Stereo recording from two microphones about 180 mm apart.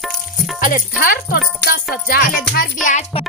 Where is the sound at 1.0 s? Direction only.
55° left (ahead or behind).